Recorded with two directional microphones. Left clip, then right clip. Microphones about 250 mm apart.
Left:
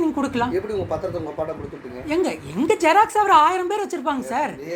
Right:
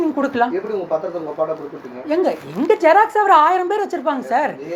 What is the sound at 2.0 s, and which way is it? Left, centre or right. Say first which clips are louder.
A woman's voice: right 4 dB; left.